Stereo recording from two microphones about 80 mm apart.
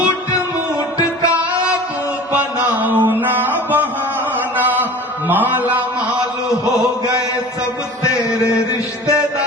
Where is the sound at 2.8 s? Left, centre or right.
Right.